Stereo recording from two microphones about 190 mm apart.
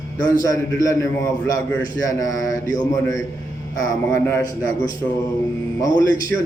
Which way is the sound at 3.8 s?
10° left (ahead or behind).